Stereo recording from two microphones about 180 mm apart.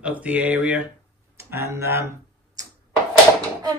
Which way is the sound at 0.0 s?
10° right (ahead or behind).